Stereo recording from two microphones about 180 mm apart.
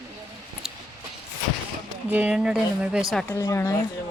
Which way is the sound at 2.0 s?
10° right (ahead or behind).